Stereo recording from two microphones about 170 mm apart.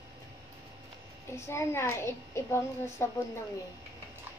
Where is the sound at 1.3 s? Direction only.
15° left (ahead or behind).